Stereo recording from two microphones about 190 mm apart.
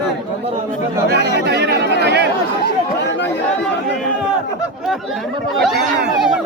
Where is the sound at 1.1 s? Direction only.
60° right (ahead or behind).